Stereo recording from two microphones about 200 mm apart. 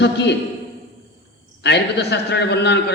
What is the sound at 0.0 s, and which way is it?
Speech, 60° left (ahead or behind).